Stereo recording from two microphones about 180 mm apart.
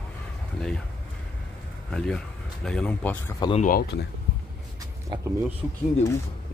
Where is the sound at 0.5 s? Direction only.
5° left (ahead or behind).